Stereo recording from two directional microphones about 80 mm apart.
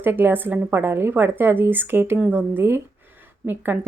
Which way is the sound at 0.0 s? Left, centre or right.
Right.